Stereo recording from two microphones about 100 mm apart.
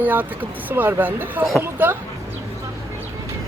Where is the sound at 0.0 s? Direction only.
20° right (ahead or behind).